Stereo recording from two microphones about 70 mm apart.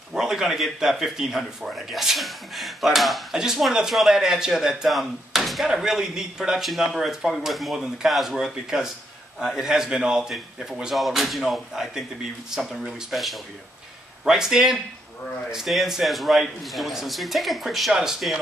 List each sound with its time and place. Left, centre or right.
0.1 s a man's voice: centre